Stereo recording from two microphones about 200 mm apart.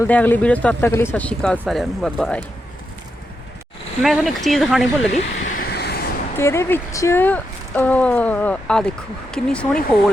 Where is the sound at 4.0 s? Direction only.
Centre (ahead or behind).